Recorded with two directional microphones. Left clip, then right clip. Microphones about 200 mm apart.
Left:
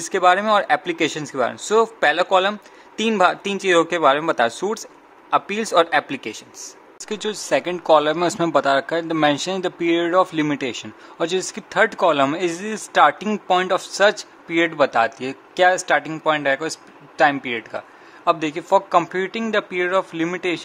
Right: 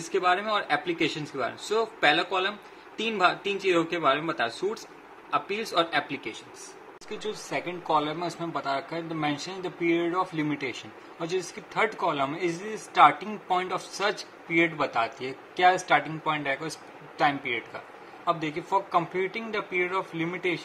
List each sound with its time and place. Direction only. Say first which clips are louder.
0.1 s speech: left 9 dB; 55° left (ahead or behind)